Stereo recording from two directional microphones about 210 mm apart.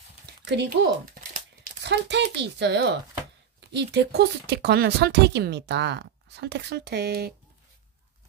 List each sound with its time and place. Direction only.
0.5 s speech: 55° right (ahead or behind)
1.2 s crumpling: 40° right (ahead or behind)
1.8 s speech: 55° right (ahead or behind)